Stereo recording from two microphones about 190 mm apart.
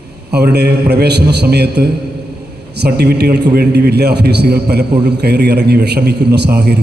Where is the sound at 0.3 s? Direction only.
60° right (ahead or behind).